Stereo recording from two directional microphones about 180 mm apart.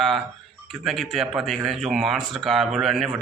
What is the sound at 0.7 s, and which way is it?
Speech, centre (ahead or behind).